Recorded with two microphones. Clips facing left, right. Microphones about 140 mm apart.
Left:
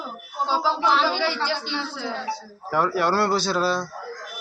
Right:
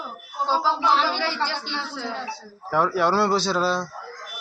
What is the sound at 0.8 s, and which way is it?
Speech, 10° left (ahead or behind).